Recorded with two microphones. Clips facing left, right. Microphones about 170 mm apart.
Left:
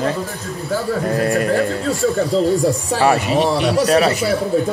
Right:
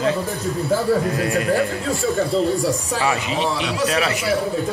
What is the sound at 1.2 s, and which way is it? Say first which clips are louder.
Speech: left 4 dB; 45° left (ahead or behind).